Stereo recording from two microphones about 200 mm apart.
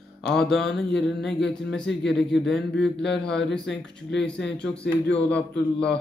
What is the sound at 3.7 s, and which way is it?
Speech, 60° left (ahead or behind).